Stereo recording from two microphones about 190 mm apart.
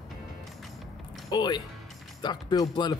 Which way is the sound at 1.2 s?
20° left (ahead or behind).